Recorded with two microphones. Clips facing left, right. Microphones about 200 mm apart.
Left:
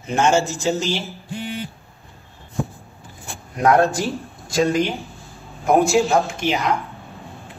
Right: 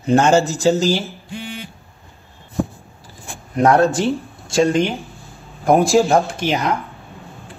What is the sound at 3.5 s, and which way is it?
A man's voice, 25° right (ahead or behind).